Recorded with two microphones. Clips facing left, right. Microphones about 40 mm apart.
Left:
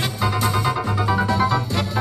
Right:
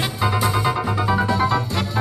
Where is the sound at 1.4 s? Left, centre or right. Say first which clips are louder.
Even; right.